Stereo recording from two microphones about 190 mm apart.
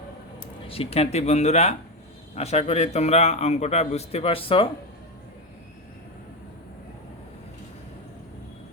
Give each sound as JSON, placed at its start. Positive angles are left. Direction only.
{"t": 0.3, "sound": "a man's voice", "side_deg": 30}